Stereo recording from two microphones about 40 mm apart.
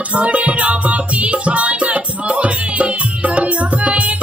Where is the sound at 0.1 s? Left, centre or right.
Right.